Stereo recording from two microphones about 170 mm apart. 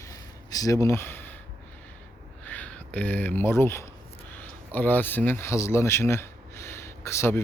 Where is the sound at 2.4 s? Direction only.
10° left (ahead or behind).